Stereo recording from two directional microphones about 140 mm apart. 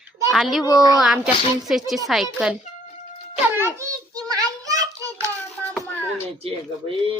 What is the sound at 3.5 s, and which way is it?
Speech, 15° right (ahead or behind).